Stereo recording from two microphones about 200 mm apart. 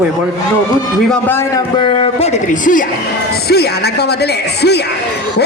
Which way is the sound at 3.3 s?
55° left (ahead or behind).